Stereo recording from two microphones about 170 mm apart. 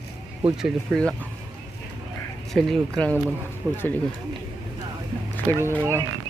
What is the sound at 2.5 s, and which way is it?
Speech, 5° left (ahead or behind).